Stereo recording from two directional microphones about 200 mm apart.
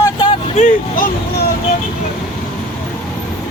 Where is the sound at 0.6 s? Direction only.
40° left (ahead or behind).